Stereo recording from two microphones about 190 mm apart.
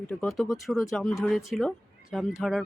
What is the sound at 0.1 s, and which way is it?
Speech, 5° left (ahead or behind).